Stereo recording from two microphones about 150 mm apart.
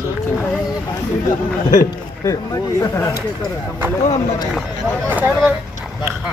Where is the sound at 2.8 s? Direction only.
20° left (ahead or behind).